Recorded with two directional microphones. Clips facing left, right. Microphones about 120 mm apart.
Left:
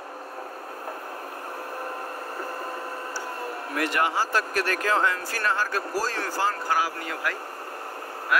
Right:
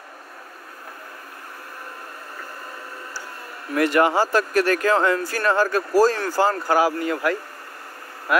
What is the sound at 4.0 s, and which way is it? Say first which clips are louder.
A man's voice: right 7 dB; 60° right (ahead or behind).